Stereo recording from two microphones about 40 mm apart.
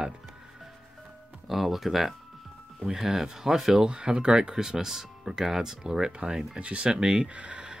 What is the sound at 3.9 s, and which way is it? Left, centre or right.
Speech, right.